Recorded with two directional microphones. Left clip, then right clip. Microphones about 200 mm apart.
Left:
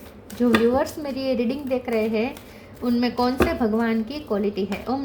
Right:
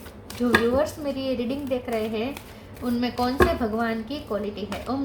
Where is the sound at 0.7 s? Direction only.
45° left (ahead or behind).